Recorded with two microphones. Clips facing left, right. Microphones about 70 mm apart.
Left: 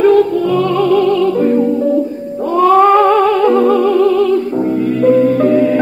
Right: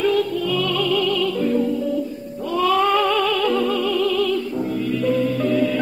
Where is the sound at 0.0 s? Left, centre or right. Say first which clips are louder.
Left 10 dB; left.